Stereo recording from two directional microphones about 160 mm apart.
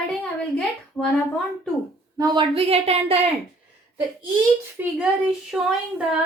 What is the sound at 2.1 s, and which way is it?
A woman's voice, 25° right (ahead or behind).